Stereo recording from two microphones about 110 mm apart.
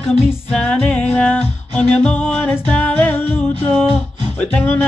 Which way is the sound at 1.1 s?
10° left (ahead or behind).